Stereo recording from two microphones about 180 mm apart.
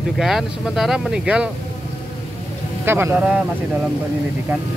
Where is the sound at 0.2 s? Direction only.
Centre (ahead or behind).